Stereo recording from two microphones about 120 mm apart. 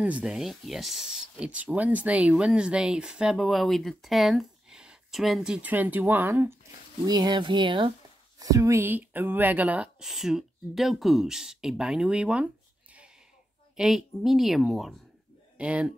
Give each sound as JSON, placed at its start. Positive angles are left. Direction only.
{"t": 0.0, "sound": "speech", "side_deg": -10}
{"t": 7.1, "sound": "speech", "side_deg": -35}
{"t": 8.4, "sound": "speech", "side_deg": -30}
{"t": 13.7, "sound": "speech", "side_deg": -5}